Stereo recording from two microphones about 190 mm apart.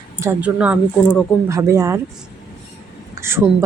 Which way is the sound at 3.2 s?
15° right (ahead or behind).